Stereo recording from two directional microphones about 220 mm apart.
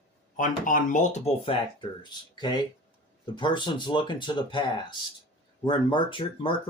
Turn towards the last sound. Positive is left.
turn(degrees=20)  # may be behind; listen again after turning